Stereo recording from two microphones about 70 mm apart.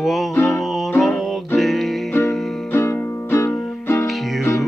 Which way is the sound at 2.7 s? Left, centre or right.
Left.